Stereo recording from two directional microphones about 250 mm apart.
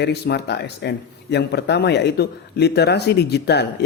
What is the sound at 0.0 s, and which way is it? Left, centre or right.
Speech, left.